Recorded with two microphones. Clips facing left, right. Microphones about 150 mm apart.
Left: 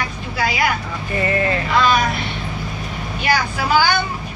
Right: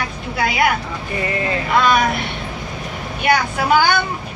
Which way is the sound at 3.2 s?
55° right (ahead or behind).